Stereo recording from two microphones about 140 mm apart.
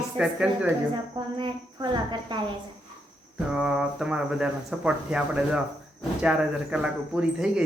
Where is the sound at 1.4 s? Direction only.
35° right (ahead or behind).